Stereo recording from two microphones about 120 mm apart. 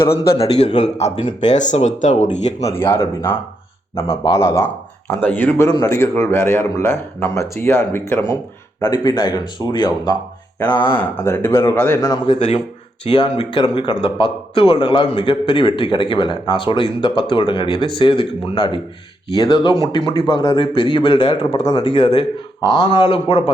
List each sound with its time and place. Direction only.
0.1 s a man's voice: 55° left (ahead or behind); by 2.6 s 80° left
2.6 s a man's voice: 20° left (ahead or behind)
4.4 s speech: 25° left (ahead or behind)
5.5 s a man's voice: 25° left (ahead or behind)
10.8 s a man's voice: 20° left (ahead or behind)
12.3 s speech: 60° left (ahead or behind)
13.1 s a man's voice: 45° left (ahead or behind)